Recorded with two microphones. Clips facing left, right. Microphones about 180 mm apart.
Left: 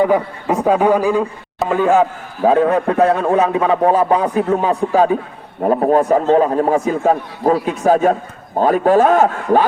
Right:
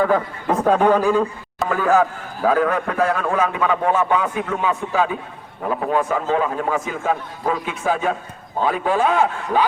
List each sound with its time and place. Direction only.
0.0 s a man's voice: 15° left (ahead or behind)
1.7 s a man's voice: 20° left (ahead or behind); by 9.6 s 45° left (ahead or behind)